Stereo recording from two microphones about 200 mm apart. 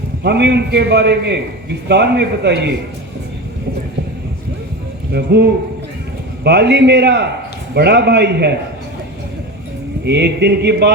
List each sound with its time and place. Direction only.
0.3 s a man's voice: 55° right (ahead or behind)
5.1 s a man's voice: 55° right (ahead or behind)
10.0 s a man's voice: 55° right (ahead or behind)